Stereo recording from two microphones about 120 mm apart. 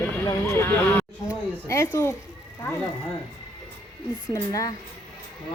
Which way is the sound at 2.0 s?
20° left (ahead or behind).